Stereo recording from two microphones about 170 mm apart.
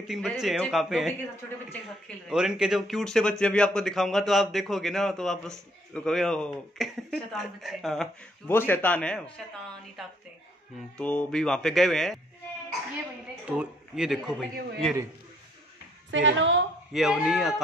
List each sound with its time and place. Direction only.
0.1 s speech: centre (ahead or behind)
2.2 s speech: 5° right (ahead or behind)
8.5 s a woman's voice: 10° left (ahead or behind)
13.5 s speech: 5° right (ahead or behind)
16.1 s a woman's voice: 90° right
16.9 s speech: 5° right (ahead or behind)